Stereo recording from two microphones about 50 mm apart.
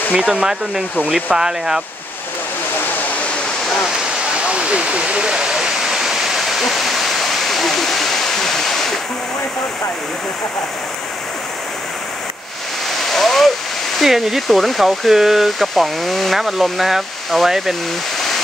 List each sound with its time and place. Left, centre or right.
0.1 s speech: centre
4.4 s waterfall: right; by 8.8 s centre
13.1 s waterfall: centre
13.9 s speech: centre